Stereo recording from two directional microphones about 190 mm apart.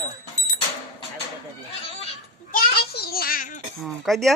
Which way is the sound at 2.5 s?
55° left (ahead or behind).